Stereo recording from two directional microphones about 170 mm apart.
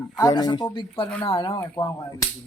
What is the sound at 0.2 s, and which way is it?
Speech, 25° left (ahead or behind).